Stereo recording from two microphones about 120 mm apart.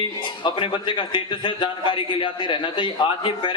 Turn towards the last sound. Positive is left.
turn(degrees=45)  # may be behind; listen again after turning